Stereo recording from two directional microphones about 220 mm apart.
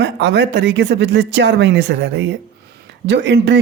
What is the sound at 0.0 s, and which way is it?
Speech, 50° right (ahead or behind).